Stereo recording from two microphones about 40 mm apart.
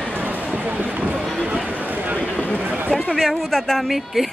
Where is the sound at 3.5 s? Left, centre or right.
Centre.